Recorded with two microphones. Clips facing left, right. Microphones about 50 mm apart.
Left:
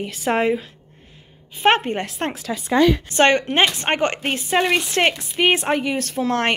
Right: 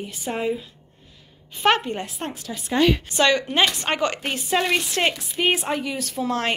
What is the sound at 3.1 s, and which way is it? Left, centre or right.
Speech, left.